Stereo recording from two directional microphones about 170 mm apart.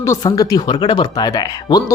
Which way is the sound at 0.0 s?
20° left (ahead or behind).